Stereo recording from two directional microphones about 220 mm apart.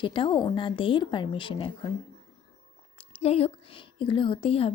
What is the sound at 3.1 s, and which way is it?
A woman's voice, 25° left (ahead or behind).